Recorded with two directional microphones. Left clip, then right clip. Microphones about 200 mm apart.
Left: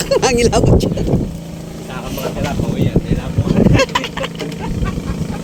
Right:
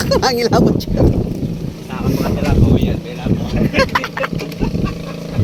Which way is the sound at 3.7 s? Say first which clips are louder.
Even; 15° left (ahead or behind).